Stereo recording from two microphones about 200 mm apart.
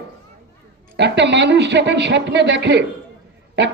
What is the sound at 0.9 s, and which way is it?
A man's voice, 60° right (ahead or behind).